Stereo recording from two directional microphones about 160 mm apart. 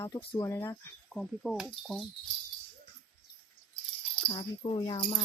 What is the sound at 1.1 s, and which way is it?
Speech, centre (ahead or behind).